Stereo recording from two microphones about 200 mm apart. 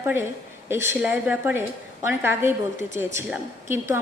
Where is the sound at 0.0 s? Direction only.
10° right (ahead or behind).